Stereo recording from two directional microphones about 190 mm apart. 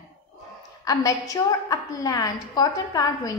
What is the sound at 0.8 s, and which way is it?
A woman's voice, 20° left (ahead or behind).